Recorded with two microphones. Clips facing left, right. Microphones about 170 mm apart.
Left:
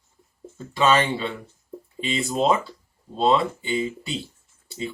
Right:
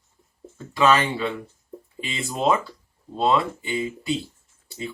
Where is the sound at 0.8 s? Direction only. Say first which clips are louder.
Right 1 dB; 25° left (ahead or behind).